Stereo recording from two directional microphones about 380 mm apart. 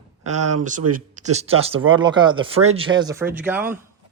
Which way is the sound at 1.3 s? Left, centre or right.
Centre.